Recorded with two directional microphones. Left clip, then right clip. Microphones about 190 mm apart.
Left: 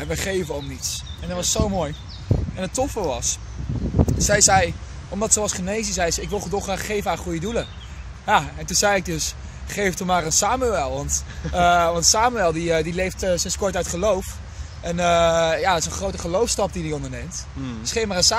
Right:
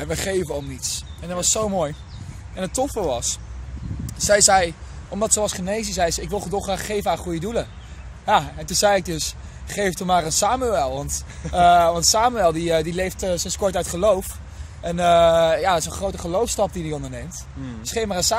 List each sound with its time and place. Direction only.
0.0 s speech: 30° right (ahead or behind)